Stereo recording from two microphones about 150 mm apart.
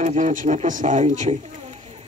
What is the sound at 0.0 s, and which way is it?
Speech, 60° right (ahead or behind).